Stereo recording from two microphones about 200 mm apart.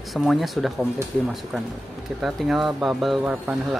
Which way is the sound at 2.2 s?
Centre (ahead or behind).